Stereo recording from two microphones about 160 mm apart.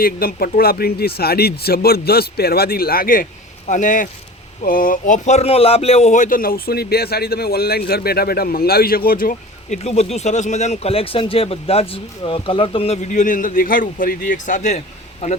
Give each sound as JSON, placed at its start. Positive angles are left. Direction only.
{"t": 0.0, "sound": "speech", "side_deg": 65}
{"t": 3.7, "sound": "a man's voice", "side_deg": 50}